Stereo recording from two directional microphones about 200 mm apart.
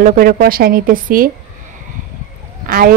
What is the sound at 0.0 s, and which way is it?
A man's voice, 45° right (ahead or behind).